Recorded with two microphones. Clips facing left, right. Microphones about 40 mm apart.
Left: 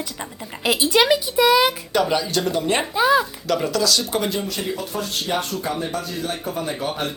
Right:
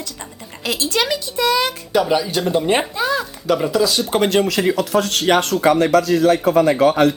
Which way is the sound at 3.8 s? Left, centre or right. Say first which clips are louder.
Right 3 dB; right.